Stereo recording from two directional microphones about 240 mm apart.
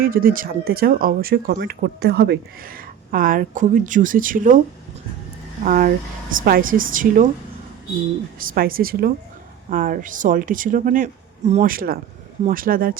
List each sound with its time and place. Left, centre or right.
0.0 s speech: right
5.6 s speech: right
8.5 s speech: right